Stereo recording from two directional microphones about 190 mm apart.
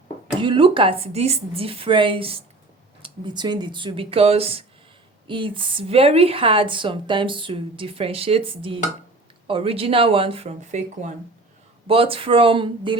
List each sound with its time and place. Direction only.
0.3 s a woman's voice: 25° right (ahead or behind)